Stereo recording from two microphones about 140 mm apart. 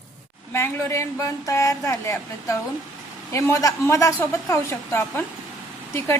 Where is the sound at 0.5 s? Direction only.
20° left (ahead or behind).